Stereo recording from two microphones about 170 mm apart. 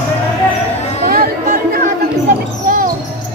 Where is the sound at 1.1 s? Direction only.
60° right (ahead or behind).